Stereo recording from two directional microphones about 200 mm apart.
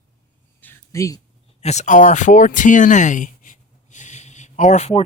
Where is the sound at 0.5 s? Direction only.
10° left (ahead or behind).